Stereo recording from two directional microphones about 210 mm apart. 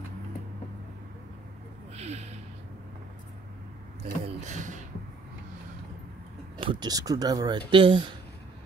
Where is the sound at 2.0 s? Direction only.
30° right (ahead or behind).